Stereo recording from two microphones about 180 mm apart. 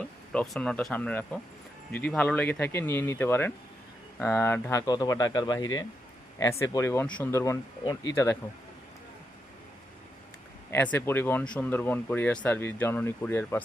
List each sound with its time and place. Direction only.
0.0 s speech: 5° left (ahead or behind)
4.9 s speech: 20° left (ahead or behind)
10.9 s speech: 10° left (ahead or behind)